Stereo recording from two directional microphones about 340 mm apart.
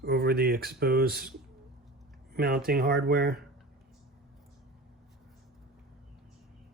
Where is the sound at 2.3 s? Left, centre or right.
Right.